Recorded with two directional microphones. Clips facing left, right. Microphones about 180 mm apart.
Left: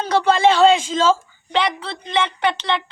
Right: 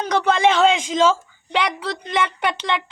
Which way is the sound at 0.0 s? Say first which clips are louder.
Left 2 dB; 15° right (ahead or behind).